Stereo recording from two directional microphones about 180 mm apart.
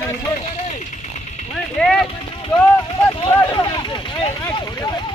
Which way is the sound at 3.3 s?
20° left (ahead or behind).